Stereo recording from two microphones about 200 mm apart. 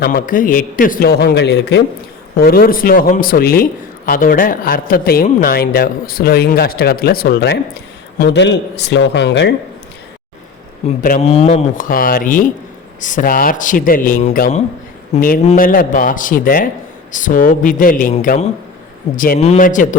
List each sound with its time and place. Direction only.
0.0 s a man's voice: 45° left (ahead or behind)
10.8 s speech: 40° left (ahead or behind)